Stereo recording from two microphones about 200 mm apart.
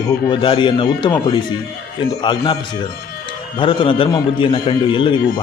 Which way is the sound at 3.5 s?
25° left (ahead or behind).